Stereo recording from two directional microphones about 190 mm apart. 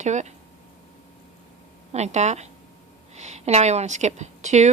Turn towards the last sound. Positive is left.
turn(degrees=-35)  # may be behind; listen again after turning